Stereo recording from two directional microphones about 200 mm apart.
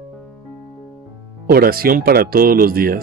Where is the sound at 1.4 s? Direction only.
50° right (ahead or behind).